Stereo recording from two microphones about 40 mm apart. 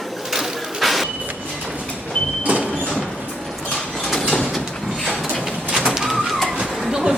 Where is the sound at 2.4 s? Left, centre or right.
Right.